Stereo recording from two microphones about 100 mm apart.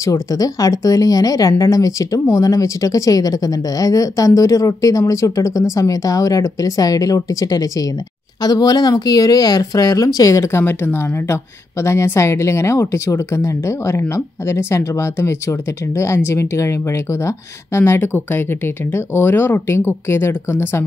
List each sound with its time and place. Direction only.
0.0 s speech: 35° left (ahead or behind)
10.6 s speech: 20° left (ahead or behind)